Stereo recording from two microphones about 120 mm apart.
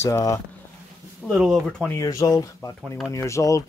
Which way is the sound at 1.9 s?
30° left (ahead or behind).